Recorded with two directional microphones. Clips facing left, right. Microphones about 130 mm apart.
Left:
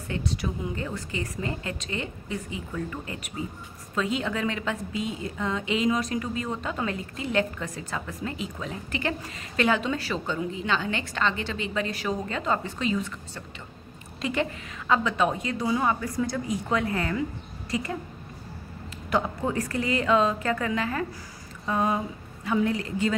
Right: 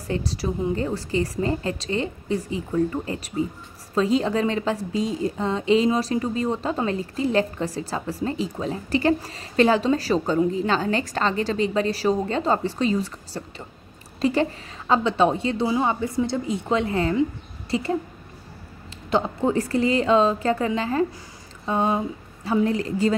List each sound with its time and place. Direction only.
0.1 s a woman's voice: 35° right (ahead or behind)
19.0 s a woman's voice: 25° right (ahead or behind)